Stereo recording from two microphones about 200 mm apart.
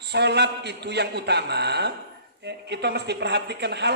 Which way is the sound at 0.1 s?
55° right (ahead or behind).